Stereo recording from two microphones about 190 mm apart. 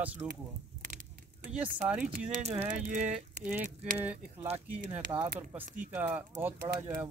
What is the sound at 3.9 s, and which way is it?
Speech, 10° right (ahead or behind).